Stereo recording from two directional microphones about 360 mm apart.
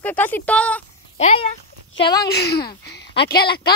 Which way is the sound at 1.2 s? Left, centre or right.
Centre.